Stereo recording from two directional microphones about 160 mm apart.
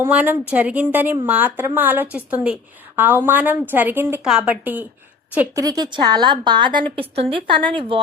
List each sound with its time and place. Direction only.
0.0 s a woman's voice: 10° right (ahead or behind)
5.5 s a woman's voice: 25° right (ahead or behind)